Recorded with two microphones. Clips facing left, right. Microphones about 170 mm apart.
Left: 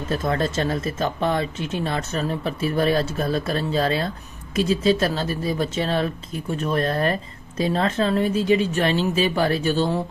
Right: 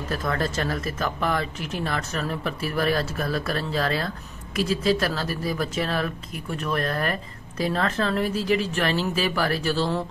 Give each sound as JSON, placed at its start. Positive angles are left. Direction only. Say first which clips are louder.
{"t": 0.1, "sound": "speech", "louder": "left 4 dB", "side_deg": 25}